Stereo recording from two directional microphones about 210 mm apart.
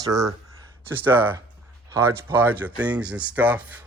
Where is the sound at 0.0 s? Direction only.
15° right (ahead or behind).